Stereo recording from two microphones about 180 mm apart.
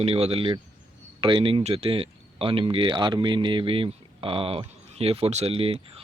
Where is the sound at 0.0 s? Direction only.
35° right (ahead or behind).